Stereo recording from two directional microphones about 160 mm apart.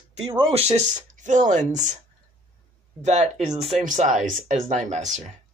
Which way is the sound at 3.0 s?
45° right (ahead or behind).